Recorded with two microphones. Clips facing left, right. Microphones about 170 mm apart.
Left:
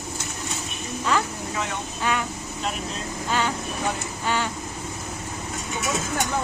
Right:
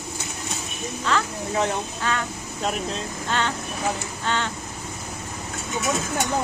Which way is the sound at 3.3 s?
10° left (ahead or behind).